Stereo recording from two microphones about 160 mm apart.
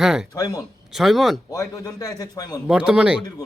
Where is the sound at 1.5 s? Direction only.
20° left (ahead or behind).